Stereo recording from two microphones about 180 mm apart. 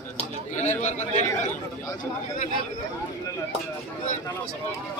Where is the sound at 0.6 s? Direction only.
40° left (ahead or behind).